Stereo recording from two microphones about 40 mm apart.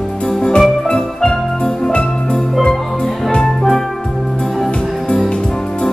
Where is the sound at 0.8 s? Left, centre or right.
Centre.